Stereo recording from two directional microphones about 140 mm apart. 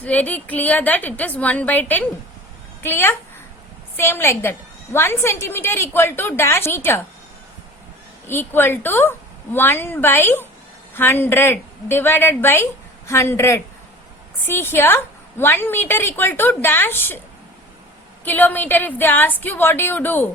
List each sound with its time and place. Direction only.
0.0 s a woman's voice: 10° left (ahead or behind)
8.3 s a woman's voice: 15° left (ahead or behind)
18.3 s a woman's voice: 15° left (ahead or behind)